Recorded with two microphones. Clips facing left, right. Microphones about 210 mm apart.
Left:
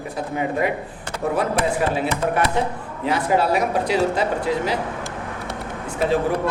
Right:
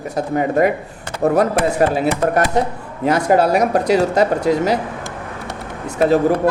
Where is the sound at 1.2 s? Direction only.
45° right (ahead or behind).